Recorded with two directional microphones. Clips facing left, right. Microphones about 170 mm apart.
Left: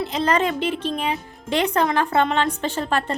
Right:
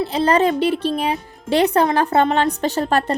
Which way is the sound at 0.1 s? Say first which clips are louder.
Right 5 dB; 35° right (ahead or behind).